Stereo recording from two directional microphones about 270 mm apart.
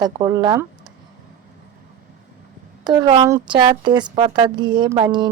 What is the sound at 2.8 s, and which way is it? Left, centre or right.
A woman's voice, centre.